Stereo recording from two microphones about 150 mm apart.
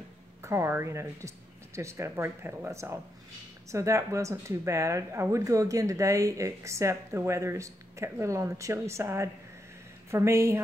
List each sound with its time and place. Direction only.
0.4 s speech: 20° right (ahead or behind)